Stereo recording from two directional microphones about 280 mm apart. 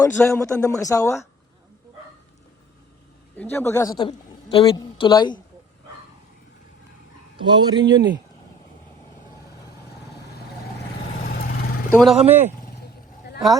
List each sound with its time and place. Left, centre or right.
0.0 s a woman's voice: centre
3.5 s a woman's voice: centre
7.3 s speech: centre
11.2 s vehicle: left
11.9 s speech: centre